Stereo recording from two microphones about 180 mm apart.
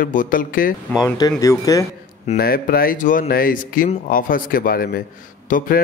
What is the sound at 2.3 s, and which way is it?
A man's voice, 55° left (ahead or behind).